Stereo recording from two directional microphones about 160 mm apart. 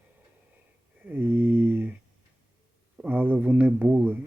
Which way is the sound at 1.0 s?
10° right (ahead or behind).